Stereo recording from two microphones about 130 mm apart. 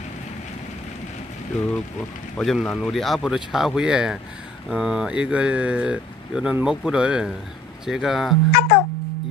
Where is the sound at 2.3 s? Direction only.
5° left (ahead or behind).